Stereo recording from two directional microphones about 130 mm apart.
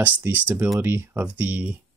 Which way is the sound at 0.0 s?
15° right (ahead or behind).